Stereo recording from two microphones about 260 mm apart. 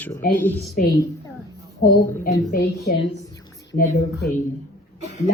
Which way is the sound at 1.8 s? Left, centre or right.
Left.